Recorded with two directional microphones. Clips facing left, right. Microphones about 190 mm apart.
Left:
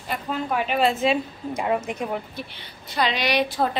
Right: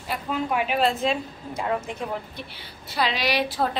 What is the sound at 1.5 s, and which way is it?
Speech, 15° left (ahead or behind).